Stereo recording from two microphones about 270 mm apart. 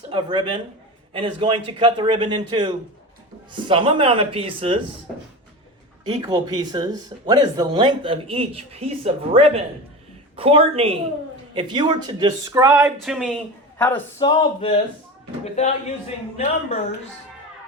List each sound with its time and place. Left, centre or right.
0.1 s a man's voice: centre
6.1 s a man's voice: centre; by 15.7 s left